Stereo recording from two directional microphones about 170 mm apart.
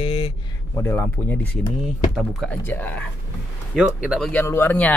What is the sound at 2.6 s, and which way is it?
Speech, 10° left (ahead or behind).